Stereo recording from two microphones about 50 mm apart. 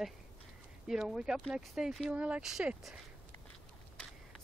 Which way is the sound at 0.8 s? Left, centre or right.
Centre.